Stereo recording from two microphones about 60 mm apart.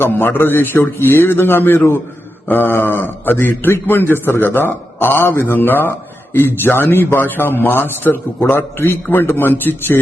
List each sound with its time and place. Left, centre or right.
0.0 s a man's voice: left